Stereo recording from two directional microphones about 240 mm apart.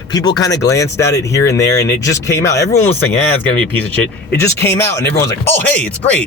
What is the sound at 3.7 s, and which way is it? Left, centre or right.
Speech, centre.